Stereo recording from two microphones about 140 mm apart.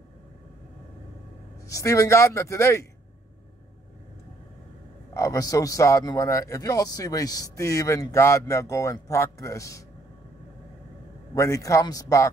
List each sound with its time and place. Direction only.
1.7 s a man's voice: 20° left (ahead or behind)
5.1 s a man's voice: 25° left (ahead or behind)
11.3 s a man's voice: 20° left (ahead or behind)